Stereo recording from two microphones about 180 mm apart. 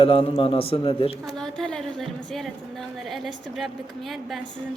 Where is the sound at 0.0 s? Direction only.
30° left (ahead or behind).